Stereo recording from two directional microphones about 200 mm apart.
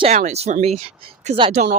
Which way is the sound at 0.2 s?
35° right (ahead or behind).